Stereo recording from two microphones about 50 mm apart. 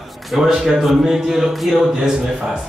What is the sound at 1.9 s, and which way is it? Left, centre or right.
Speech, centre.